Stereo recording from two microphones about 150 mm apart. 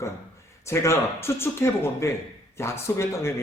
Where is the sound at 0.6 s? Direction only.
20° left (ahead or behind).